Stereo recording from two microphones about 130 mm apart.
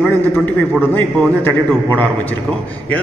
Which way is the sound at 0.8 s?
15° left (ahead or behind).